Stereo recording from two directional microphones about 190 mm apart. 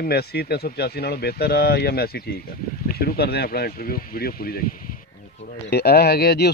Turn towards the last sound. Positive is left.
turn(degrees=60)  # may be behind; listen again after turning